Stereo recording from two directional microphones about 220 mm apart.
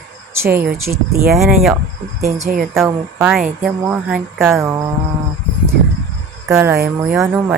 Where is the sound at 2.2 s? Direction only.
35° right (ahead or behind).